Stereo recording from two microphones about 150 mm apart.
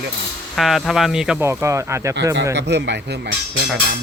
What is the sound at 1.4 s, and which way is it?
Speech, 20° right (ahead or behind).